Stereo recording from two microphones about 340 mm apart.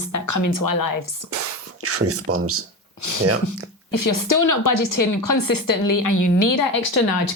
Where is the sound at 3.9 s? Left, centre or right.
Left.